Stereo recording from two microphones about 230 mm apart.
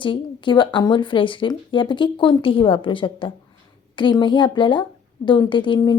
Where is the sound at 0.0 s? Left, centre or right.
Left.